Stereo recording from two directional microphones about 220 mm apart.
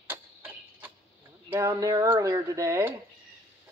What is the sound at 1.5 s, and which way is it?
Speech, 15° right (ahead or behind).